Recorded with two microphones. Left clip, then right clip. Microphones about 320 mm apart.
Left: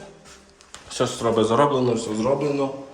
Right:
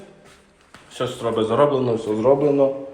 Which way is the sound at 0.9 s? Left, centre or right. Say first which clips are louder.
Left 2 dB; centre.